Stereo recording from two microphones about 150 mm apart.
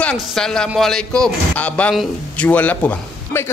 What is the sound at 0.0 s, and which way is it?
Speech, 5° left (ahead or behind).